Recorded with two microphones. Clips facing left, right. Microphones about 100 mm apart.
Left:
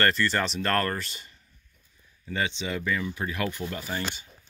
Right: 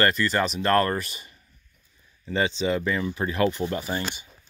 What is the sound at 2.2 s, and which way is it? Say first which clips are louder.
Speech: right 6 dB; 30° right (ahead or behind).